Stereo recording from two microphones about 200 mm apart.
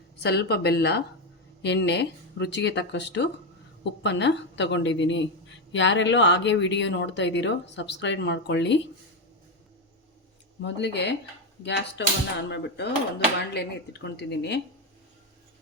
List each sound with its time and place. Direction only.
0.2 s a woman's voice: 55° left (ahead or behind)
10.6 s a woman's voice: 60° left (ahead or behind)